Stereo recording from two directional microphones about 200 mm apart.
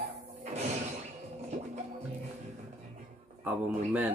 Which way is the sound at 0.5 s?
35° right (ahead or behind).